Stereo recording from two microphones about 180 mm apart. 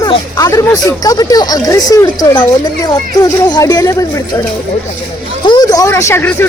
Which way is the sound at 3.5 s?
20° left (ahead or behind).